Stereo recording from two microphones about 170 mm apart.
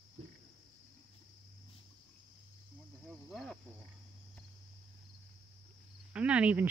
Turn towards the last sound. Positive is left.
turn(degrees=-10)  # may be behind; listen again after turning